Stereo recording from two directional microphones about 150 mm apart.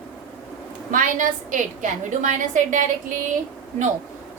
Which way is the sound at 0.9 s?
60° right (ahead or behind).